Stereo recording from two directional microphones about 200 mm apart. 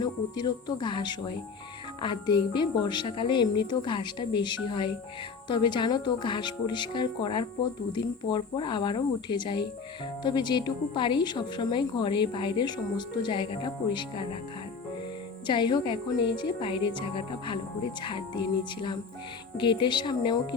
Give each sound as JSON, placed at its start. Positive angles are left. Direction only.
{"t": 0.0, "sound": "a woman's voice", "side_deg": 20}
{"t": 15.4, "sound": "a woman's voice", "side_deg": 25}